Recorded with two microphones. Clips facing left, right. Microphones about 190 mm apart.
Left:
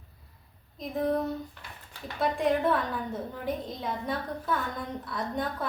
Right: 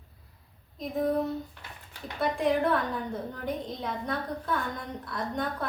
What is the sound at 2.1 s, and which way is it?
A woman's voice, centre (ahead or behind).